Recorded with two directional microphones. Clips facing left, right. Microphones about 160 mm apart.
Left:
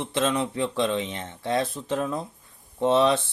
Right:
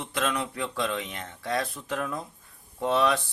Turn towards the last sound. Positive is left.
turn(degrees=25)  # may be behind; listen again after turning